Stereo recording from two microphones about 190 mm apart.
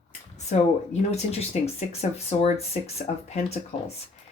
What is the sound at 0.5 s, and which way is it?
Speech, 40° left (ahead or behind).